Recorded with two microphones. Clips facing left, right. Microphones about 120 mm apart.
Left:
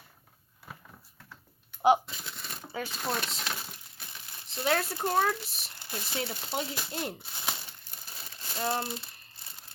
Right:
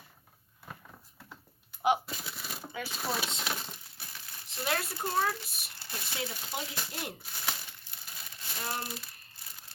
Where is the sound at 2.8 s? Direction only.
5° right (ahead or behind).